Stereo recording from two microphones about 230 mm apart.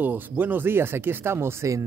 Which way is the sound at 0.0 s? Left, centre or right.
Centre.